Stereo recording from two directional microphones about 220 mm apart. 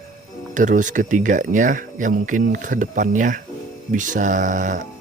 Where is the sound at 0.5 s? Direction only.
35° right (ahead or behind).